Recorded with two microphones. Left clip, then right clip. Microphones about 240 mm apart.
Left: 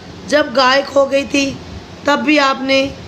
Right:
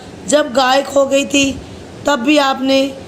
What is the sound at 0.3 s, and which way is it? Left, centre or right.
A woman's voice, centre.